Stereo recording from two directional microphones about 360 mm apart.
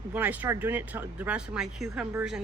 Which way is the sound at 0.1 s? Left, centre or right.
Centre.